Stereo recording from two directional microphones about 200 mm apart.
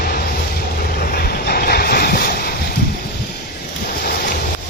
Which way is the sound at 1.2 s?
50° left (ahead or behind).